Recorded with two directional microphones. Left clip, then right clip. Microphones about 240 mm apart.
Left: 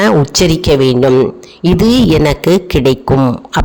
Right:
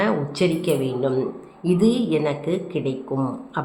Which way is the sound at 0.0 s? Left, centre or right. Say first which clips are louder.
Left 11 dB; left.